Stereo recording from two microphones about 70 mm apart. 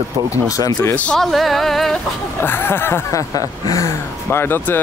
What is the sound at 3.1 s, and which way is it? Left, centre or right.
Speech, left.